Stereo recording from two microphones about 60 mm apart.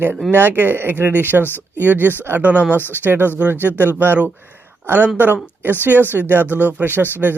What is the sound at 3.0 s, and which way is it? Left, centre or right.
A man's voice, right.